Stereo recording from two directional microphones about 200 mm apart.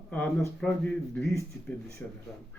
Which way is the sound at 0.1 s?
5° left (ahead or behind).